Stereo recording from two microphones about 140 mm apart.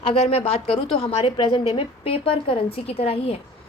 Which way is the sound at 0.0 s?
45° left (ahead or behind).